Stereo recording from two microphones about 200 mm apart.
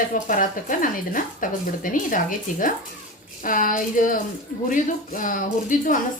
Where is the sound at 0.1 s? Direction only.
45° left (ahead or behind).